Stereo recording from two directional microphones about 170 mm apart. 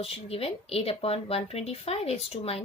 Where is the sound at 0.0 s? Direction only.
35° left (ahead or behind).